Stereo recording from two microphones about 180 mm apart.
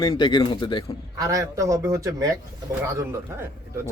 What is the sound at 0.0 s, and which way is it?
Speech, 25° left (ahead or behind).